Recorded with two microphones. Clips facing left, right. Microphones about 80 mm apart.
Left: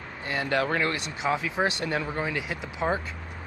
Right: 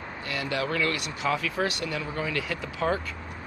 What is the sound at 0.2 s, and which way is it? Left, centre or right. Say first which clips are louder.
Speech: left 4 dB; left.